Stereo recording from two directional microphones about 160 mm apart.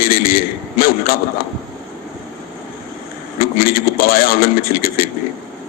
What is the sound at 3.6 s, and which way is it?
A man's voice, 65° left (ahead or behind).